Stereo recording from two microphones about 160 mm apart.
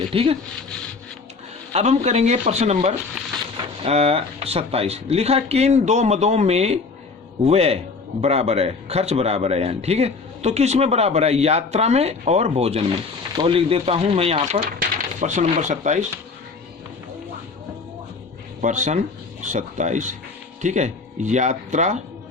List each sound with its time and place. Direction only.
0.1 s speech: 35° right (ahead or behind)
1.7 s speech: 45° right (ahead or behind)
18.6 s speech: 50° right (ahead or behind)